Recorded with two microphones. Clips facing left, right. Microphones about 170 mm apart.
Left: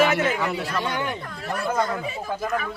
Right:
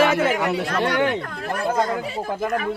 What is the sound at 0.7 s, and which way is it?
Speech, 75° right (ahead or behind).